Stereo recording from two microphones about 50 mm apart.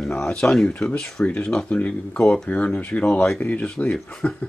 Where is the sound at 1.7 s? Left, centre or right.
Left.